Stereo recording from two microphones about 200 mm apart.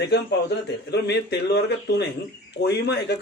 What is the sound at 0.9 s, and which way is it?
A man's voice, 55° left (ahead or behind).